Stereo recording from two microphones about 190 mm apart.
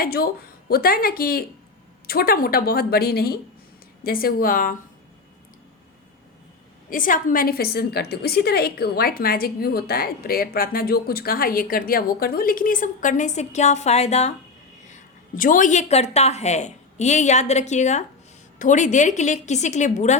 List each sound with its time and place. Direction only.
0.0 s a woman's voice: 55° left (ahead or behind)
6.9 s a woman's voice: 45° left (ahead or behind)